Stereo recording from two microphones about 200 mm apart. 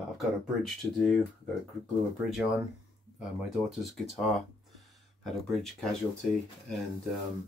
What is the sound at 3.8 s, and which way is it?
Speech, centre (ahead or behind).